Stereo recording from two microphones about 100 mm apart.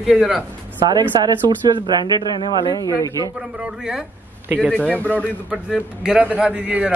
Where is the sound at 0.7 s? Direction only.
45° right (ahead or behind).